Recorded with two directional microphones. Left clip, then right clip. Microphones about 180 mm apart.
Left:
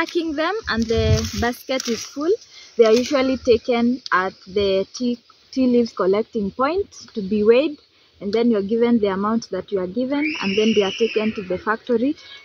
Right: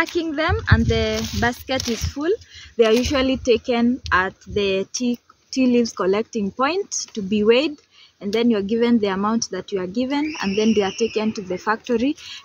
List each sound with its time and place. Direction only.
0.0 s speech: 10° right (ahead or behind)